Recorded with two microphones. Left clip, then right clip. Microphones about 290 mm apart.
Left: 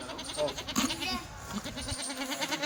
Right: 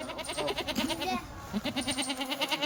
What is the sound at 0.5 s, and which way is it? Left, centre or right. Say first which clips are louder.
Goat: right 1 dB; right.